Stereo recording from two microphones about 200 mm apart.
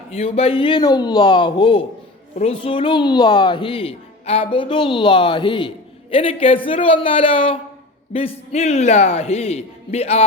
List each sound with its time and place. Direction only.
0.1 s a woman's voice: 30° left (ahead or behind)